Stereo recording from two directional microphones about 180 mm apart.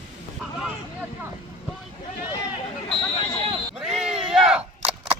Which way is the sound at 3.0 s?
35° left (ahead or behind).